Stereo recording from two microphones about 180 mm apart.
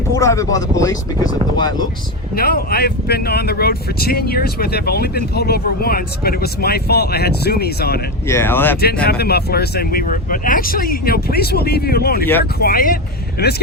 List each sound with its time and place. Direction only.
0.1 s speech: 15° left (ahead or behind)
2.3 s speech: 55° left (ahead or behind)
8.3 s speech: 15° left (ahead or behind)
9.0 s speech: 60° left (ahead or behind)